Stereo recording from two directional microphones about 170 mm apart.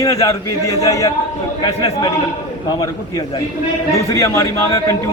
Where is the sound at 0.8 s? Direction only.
20° left (ahead or behind).